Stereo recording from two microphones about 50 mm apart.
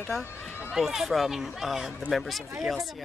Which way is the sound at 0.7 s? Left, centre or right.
Centre.